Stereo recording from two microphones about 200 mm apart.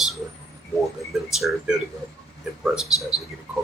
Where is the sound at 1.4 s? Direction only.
Centre (ahead or behind).